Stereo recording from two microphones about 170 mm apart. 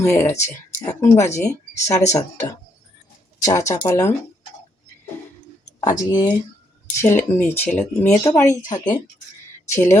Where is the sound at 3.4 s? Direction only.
20° left (ahead or behind).